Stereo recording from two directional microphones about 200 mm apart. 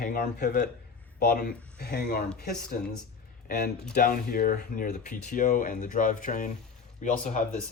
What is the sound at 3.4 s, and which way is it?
Speech, 50° left (ahead or behind).